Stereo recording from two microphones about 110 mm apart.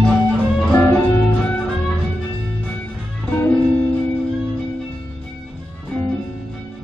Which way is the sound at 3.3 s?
20° left (ahead or behind).